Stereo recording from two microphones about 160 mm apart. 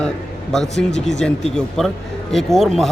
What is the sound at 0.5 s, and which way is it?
Speech, 5° left (ahead or behind).